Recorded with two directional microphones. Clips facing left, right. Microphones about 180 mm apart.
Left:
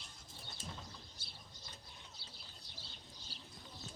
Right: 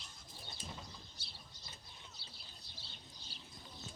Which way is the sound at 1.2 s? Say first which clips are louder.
Left 1 dB; 50° left (ahead or behind).